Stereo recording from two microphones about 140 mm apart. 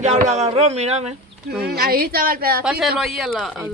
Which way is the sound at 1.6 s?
90° right.